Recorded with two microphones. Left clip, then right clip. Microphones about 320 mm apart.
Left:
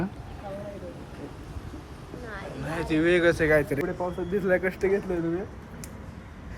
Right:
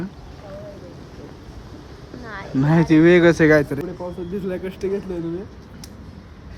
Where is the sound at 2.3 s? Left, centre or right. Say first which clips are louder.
Right 13 dB; centre.